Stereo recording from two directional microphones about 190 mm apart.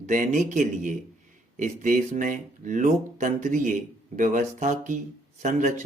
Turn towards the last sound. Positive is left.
turn(degrees=-40)  # may be behind; listen again after turning